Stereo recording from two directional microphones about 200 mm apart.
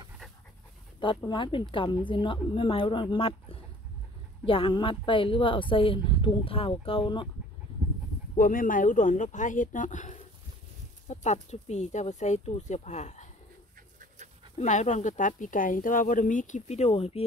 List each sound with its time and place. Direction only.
0.9 s a woman's voice: 25° left (ahead or behind)
8.4 s speech: 45° left (ahead or behind)
14.6 s speech: 35° left (ahead or behind)